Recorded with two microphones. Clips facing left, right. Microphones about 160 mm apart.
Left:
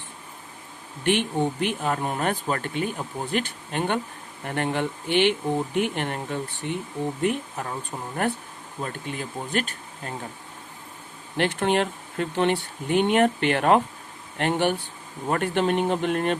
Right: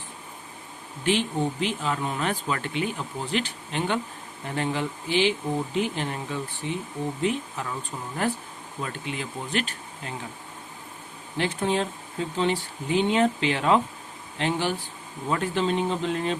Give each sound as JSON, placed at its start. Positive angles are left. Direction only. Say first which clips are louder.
{"t": 1.0, "sound": "speech", "louder": "left 2 dB", "side_deg": 60}
{"t": 11.3, "sound": "speech", "louder": "left 3 dB", "side_deg": 70}